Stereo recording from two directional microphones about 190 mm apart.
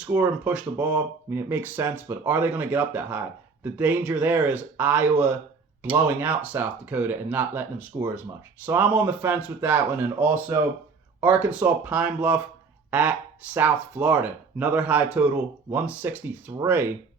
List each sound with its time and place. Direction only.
0.0 s speech: 10° right (ahead or behind)